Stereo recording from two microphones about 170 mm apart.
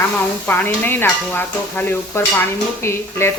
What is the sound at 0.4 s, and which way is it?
Speech, 10° left (ahead or behind).